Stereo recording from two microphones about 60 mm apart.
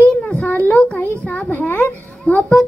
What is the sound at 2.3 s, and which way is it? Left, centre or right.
Speech, centre.